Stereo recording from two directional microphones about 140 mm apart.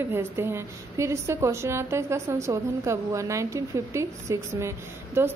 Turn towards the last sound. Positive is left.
turn(degrees=-20)  # may be behind; listen again after turning